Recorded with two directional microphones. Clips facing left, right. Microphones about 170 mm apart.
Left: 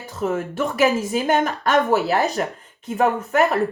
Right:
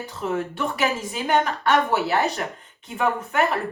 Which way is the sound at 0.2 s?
45° left (ahead or behind).